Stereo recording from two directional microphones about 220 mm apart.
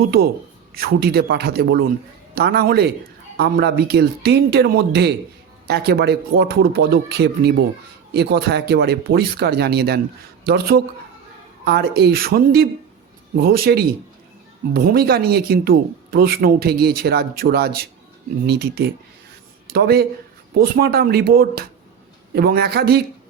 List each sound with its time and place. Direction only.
0.8 s speech: 45° right (ahead or behind)